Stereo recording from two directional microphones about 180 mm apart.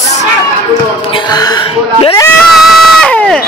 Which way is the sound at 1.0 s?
25° left (ahead or behind).